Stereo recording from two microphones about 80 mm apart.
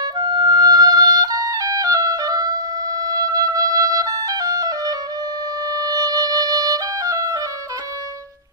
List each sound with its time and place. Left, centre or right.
0.0 s music: right